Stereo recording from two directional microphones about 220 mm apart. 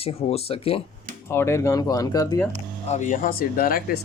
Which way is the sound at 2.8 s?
35° left (ahead or behind).